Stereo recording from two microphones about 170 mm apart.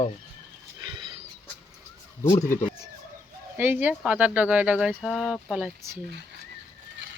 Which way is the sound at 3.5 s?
10° right (ahead or behind).